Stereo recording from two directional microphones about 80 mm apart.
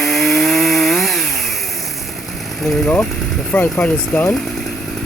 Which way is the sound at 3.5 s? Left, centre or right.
Left.